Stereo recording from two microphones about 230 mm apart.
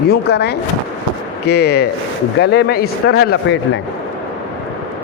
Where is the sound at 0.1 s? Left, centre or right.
Left.